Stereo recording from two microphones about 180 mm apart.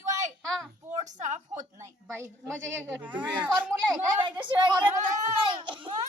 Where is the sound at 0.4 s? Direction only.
5° left (ahead or behind).